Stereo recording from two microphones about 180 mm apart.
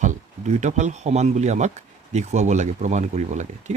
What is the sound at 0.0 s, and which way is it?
Speech, 45° right (ahead or behind).